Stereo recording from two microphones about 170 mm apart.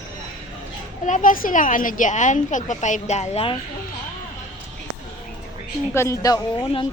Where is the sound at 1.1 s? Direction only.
50° left (ahead or behind).